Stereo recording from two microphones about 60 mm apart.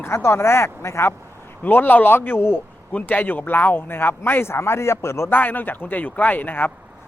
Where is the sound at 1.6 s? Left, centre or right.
Left.